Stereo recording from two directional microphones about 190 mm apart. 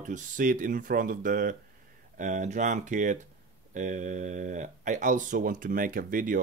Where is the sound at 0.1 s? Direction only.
45° right (ahead or behind).